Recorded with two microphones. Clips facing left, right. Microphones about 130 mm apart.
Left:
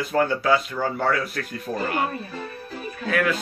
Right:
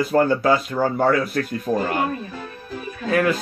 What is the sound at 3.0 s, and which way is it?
Speech, 35° right (ahead or behind).